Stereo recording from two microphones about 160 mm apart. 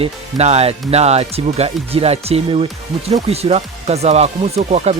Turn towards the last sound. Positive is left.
turn(degrees=-45)  # may be behind; listen again after turning